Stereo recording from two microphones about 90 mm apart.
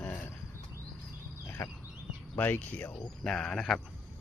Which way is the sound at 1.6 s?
20° left (ahead or behind).